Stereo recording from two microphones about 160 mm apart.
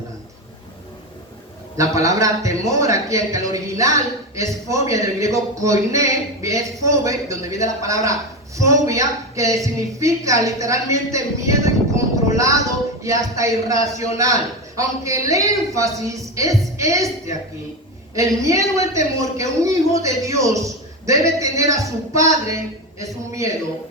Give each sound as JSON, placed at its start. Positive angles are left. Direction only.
{"t": 1.7, "sound": "a man's voice", "side_deg": -20}